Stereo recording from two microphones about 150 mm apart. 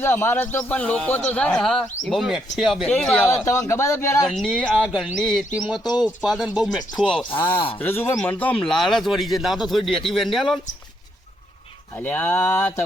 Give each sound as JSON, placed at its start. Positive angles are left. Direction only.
{"t": 0.0, "sound": "speech", "side_deg": 15}
{"t": 3.2, "sound": "speech", "side_deg": 20}
{"t": 4.3, "sound": "speech", "side_deg": 0}
{"t": 4.9, "sound": "speech", "side_deg": -5}
{"t": 5.8, "sound": "speech", "side_deg": 30}
{"t": 6.1, "sound": "speech", "side_deg": 0}
{"t": 7.8, "sound": "speech", "side_deg": 15}
{"t": 11.9, "sound": "speech", "side_deg": 10}